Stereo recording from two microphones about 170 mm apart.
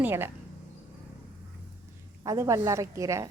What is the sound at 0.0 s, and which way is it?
Speech, 10° right (ahead or behind).